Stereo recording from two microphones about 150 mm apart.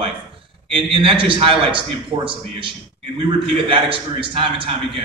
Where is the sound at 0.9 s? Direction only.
35° right (ahead or behind).